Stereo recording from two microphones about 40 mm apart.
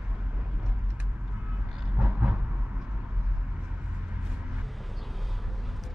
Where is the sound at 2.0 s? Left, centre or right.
Right.